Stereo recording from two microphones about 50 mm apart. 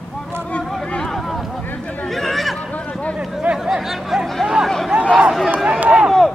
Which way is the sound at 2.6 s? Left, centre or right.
Left.